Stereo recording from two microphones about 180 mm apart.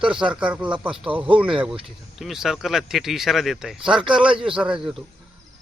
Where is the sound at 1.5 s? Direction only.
30° right (ahead or behind).